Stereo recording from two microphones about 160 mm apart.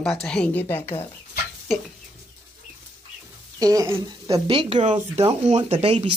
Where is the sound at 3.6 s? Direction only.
20° right (ahead or behind).